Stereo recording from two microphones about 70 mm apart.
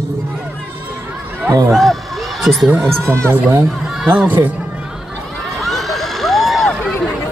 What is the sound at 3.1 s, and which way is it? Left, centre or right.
Speech, right.